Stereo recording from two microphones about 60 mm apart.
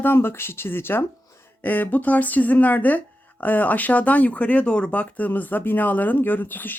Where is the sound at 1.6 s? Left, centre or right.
Left.